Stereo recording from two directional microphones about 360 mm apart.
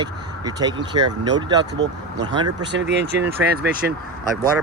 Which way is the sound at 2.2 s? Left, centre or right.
Centre.